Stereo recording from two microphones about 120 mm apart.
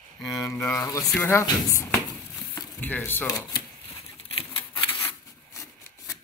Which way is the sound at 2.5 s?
15° left (ahead or behind).